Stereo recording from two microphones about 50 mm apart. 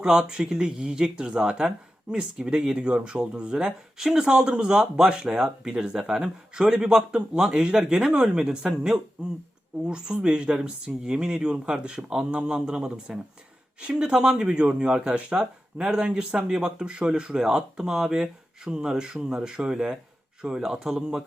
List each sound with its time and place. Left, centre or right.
0.0 s speech: centre